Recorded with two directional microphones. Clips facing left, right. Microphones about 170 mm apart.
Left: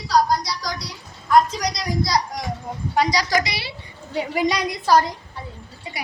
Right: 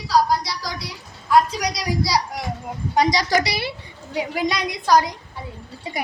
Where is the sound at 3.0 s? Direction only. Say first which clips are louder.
Right 2 dB; 25° right (ahead or behind).